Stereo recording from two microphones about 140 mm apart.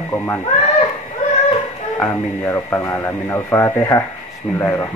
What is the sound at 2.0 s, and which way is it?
Speech, 20° left (ahead or behind).